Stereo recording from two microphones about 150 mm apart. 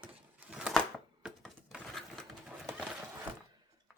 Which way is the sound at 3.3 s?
10° right (ahead or behind).